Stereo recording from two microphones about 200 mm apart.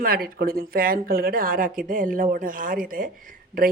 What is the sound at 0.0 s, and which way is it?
Speech, 50° right (ahead or behind).